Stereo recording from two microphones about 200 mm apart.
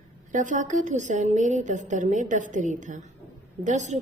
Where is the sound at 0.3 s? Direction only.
40° right (ahead or behind).